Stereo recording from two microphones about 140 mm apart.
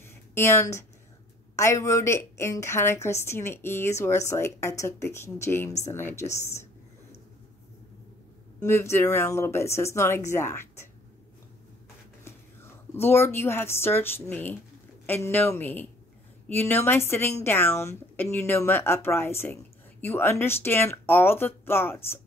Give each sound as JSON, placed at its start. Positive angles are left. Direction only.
{"t": 0.0, "sound": "a sound", "side_deg": 20}
{"t": 1.6, "sound": "a woman's voice", "side_deg": 20}
{"t": 8.5, "sound": "a woman's voice", "side_deg": 15}
{"t": 12.3, "sound": "a woman's voice", "side_deg": 15}